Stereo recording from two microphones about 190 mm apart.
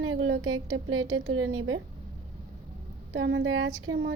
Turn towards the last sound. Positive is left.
turn(degrees=-65)  # may be behind; listen again after turning